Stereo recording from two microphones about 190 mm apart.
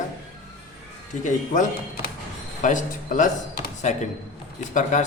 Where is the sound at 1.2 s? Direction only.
40° left (ahead or behind).